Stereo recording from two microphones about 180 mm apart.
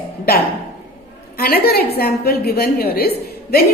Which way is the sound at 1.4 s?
55° left (ahead or behind).